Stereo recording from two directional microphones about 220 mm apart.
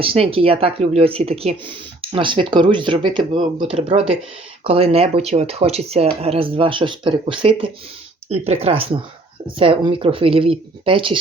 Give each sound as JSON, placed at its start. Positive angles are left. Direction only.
{"t": 0.0, "sound": "speech", "side_deg": -25}